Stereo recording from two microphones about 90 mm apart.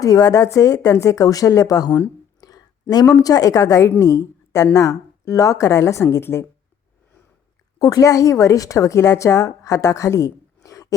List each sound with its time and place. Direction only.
0.0 s speech: 45° left (ahead or behind)
2.4 s a sound: 45° left (ahead or behind)
2.9 s speech: 45° left (ahead or behind); by 6.4 s 30° left (ahead or behind)
7.8 s a woman's voice: 40° left (ahead or behind)